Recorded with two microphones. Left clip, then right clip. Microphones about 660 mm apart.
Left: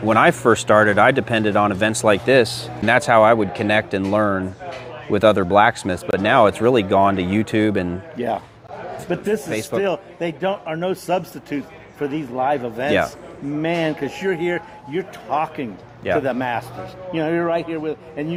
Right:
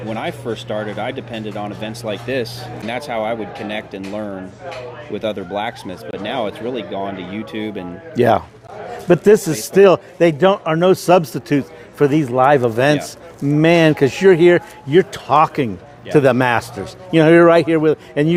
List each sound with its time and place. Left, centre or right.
0.1 s speech: left
8.1 s a man's voice: right